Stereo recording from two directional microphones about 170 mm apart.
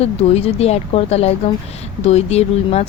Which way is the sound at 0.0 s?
35° left (ahead or behind).